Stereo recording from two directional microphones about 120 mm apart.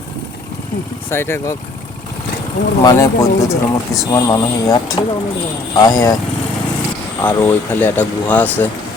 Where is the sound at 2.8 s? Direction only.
25° left (ahead or behind).